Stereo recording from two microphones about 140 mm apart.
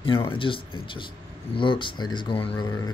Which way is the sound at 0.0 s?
40° left (ahead or behind).